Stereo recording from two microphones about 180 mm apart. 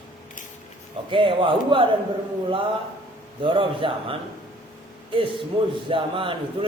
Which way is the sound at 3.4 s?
25° right (ahead or behind).